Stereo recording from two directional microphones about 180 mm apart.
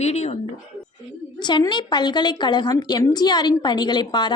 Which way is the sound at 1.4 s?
25° left (ahead or behind).